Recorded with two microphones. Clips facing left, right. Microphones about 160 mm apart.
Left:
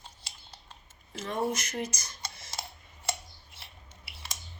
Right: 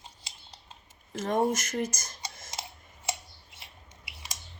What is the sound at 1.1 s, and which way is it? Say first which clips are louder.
Speech: right 5 dB; 45° right (ahead or behind).